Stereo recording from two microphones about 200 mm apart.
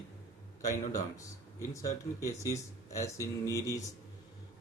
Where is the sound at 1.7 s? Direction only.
15° left (ahead or behind).